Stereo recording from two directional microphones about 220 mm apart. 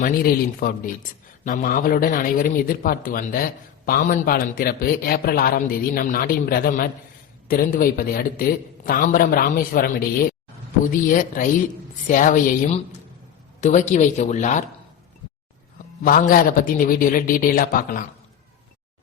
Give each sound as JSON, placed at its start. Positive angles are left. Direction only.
{"t": 0.0, "sound": "a man's voice", "side_deg": 40}
{"t": 16.0, "sound": "a man's voice", "side_deg": 40}